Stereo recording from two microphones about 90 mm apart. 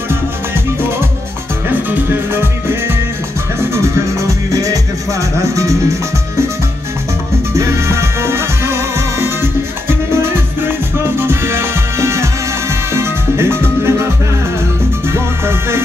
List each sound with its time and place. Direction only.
1.7 s music: 25° right (ahead or behind)
7.5 s music: 30° right (ahead or behind)
15.0 s music: 30° right (ahead or behind)